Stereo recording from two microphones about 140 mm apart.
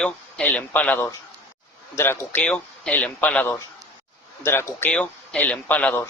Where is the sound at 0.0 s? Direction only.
5° left (ahead or behind).